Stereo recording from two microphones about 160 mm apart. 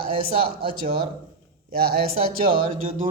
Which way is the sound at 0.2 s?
70° right (ahead or behind).